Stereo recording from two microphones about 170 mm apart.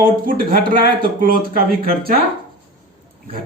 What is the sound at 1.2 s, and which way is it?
Speech, 60° right (ahead or behind).